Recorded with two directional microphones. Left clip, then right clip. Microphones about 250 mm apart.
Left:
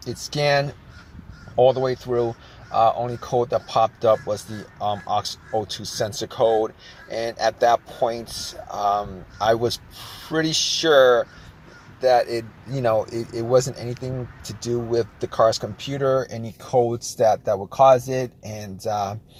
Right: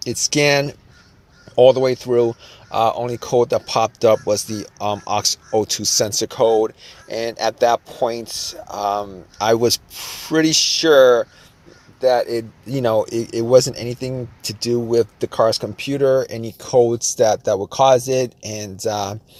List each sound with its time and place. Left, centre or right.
0.0 s speech: right